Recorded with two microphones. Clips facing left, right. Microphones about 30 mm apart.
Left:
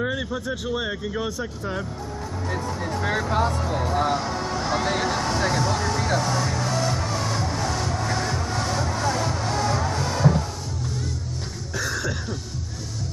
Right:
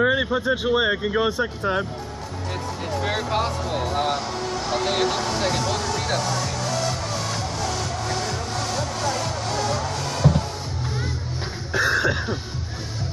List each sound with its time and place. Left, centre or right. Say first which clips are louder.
0.0 s speech: right 7 dB; right
3.1 s speech: left 1 dB; right
4.9 s speech: right 1 dB; right
11.7 s a sound: right 7 dB; right